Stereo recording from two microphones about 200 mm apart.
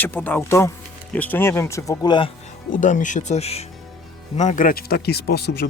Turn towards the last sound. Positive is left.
turn(degrees=55)  # may be behind; listen again after turning